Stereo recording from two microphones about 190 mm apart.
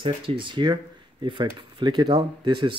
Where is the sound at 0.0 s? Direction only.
25° right (ahead or behind).